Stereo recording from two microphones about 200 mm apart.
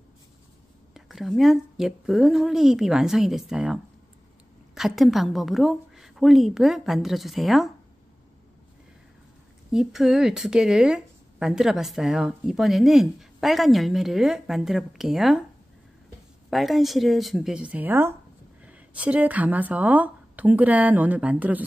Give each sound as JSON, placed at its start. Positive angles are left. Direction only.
{"t": 0.9, "sound": "speech", "side_deg": 0}
{"t": 9.7, "sound": "speech", "side_deg": 0}
{"t": 16.4, "sound": "speech", "side_deg": 0}